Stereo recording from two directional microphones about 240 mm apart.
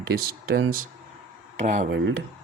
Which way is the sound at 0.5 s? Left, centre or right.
Right.